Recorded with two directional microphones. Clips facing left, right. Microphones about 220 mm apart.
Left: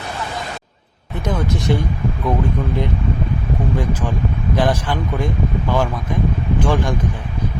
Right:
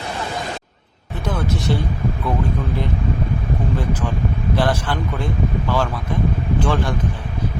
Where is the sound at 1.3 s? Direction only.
15° left (ahead or behind).